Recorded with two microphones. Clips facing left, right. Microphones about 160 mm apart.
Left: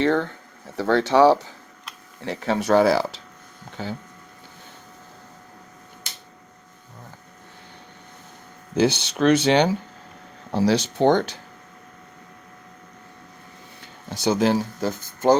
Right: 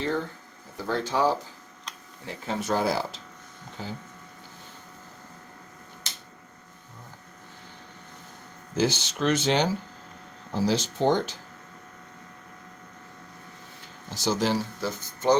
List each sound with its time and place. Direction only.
0.0 s speech: 70° left (ahead or behind)
8.8 s speech: 65° left (ahead or behind)
14.1 s speech: 60° left (ahead or behind)